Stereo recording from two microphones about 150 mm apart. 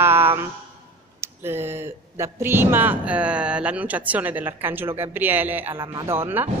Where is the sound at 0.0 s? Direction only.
15° right (ahead or behind).